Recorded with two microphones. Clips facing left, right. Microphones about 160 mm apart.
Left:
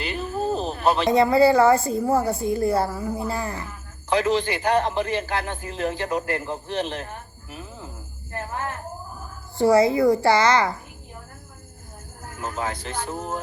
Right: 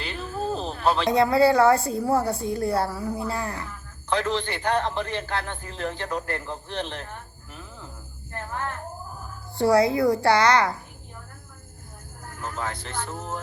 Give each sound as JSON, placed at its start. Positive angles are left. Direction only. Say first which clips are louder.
{"t": 0.0, "sound": "a man's voice", "louder": "left 4 dB", "side_deg": 5}
{"t": 9.6, "sound": "a child's voice", "louder": "left 2 dB", "side_deg": 0}
{"t": 12.5, "sound": "a man's voice", "louder": "left 3 dB", "side_deg": 15}